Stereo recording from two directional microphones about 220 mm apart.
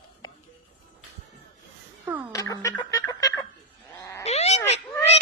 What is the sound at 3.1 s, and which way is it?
Fowl, 20° left (ahead or behind).